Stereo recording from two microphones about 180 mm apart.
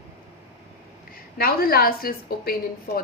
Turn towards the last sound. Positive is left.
turn(degrees=55)  # may be behind; listen again after turning